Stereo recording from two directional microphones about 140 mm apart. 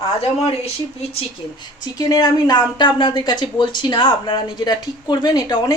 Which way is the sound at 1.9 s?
25° left (ahead or behind).